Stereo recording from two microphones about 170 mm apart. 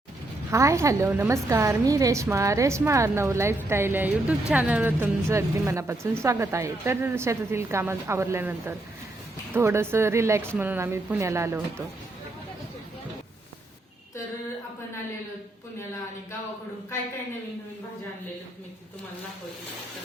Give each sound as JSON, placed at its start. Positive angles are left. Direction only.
{"t": 0.5, "sound": "a woman's voice", "side_deg": -15}